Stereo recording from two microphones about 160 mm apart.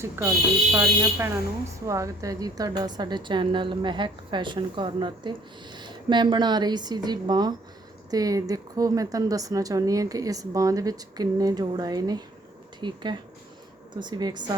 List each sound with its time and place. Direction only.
0.0 s a woman's voice: 15° right (ahead or behind)